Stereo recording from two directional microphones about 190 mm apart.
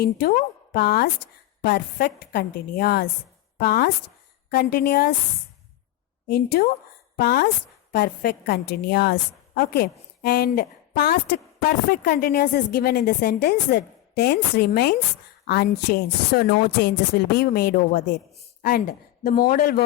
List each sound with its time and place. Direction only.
0.0 s a woman's voice: 55° left (ahead or behind)
6.2 s a woman's voice: 55° left (ahead or behind)